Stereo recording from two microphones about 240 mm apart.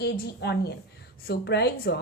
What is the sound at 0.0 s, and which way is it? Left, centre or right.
Speech, left.